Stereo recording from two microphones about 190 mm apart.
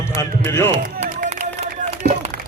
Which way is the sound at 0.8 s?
40° right (ahead or behind).